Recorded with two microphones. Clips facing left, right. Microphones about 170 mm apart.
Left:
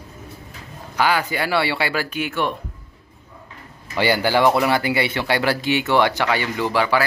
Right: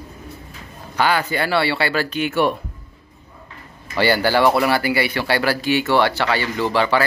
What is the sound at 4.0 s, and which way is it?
Speech, 15° left (ahead or behind).